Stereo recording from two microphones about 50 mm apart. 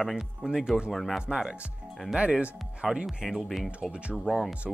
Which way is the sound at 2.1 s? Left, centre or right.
Right.